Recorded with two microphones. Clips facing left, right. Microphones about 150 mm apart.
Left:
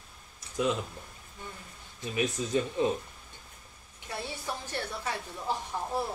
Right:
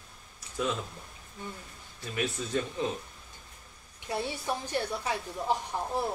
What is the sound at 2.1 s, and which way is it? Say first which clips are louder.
Speech: left 2 dB; 15° left (ahead or behind).